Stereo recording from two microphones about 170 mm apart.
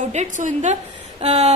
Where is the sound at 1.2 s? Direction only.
40° right (ahead or behind).